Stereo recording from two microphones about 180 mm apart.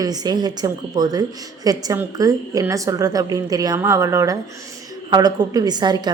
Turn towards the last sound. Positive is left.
turn(degrees=-25)  # may be behind; listen again after turning